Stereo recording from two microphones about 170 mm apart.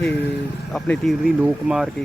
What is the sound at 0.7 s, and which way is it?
Speech, centre (ahead or behind).